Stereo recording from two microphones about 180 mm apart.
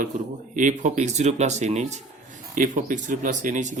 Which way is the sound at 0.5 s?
45° right (ahead or behind).